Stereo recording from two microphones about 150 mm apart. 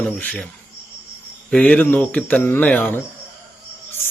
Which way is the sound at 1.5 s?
5° left (ahead or behind).